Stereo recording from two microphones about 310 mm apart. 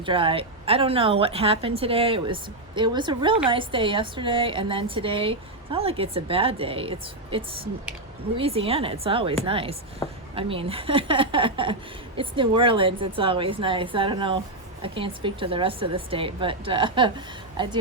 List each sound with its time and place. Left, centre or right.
0.0 s a woman's voice: centre
10.0 s a woman's voice: centre
10.3 s a woman's voice: centre